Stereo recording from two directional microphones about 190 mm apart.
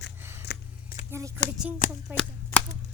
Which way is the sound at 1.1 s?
15° right (ahead or behind).